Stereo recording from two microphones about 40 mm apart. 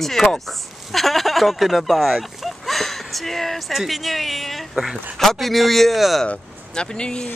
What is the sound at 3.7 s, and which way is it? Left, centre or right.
Speech, centre.